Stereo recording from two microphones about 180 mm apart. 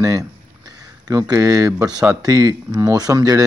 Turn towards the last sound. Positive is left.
turn(degrees=-20)  # may be behind; listen again after turning